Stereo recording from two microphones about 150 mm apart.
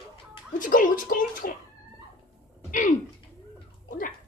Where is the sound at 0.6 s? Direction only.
65° left (ahead or behind).